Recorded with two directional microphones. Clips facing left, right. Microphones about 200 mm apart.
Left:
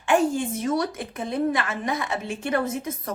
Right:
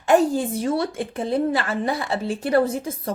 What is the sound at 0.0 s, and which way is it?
A woman's voice, 40° right (ahead or behind).